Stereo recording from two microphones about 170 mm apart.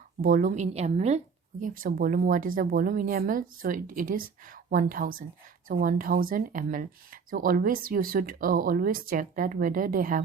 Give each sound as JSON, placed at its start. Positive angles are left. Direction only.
{"t": 0.2, "sound": "speech", "side_deg": -55}
{"t": 1.6, "sound": "speech", "side_deg": -55}